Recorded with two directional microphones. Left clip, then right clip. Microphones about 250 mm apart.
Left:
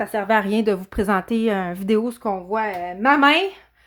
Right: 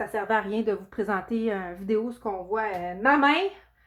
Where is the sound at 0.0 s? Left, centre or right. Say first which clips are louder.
Left 6 dB; left.